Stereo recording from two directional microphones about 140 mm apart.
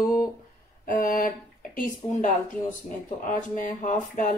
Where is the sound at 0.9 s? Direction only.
75° left (ahead or behind).